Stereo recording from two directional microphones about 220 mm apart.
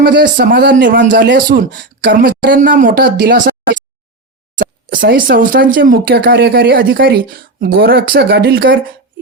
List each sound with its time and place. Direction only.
0.0 s speech: 40° right (ahead or behind)
4.6 s speech: 40° right (ahead or behind)